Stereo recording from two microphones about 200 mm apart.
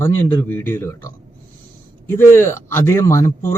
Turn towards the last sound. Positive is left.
turn(degrees=15)  # may be behind; listen again after turning